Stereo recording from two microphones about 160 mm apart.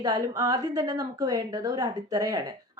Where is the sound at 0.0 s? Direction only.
25° right (ahead or behind).